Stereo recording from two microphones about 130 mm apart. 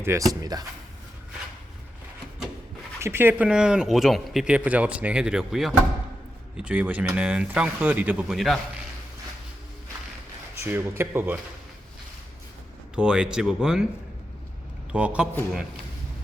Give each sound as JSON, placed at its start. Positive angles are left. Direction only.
{"t": 0.0, "sound": "speech", "side_deg": -20}
{"t": 0.5, "sound": "speech", "side_deg": -30}
{"t": 3.0, "sound": "speech", "side_deg": -15}
{"t": 10.6, "sound": "speech", "side_deg": -20}
{"t": 13.0, "sound": "speech", "side_deg": -5}
{"t": 14.9, "sound": "speech", "side_deg": -10}